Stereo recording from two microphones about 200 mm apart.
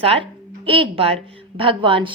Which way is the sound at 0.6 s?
25° right (ahead or behind).